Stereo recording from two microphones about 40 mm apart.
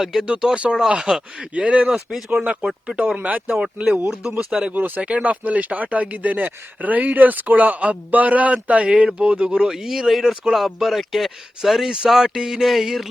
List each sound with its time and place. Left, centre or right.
0.0 s speech: centre
0.3 s speech: right
1.9 s speech: centre
2.4 s speech: right
3.4 s speech: centre
3.8 s speech: right
4.6 s speech: right
8.9 s speech: right
9.6 s speech: centre
10.1 s a sound: centre
10.5 s speech: centre
12.6 s a sound: centre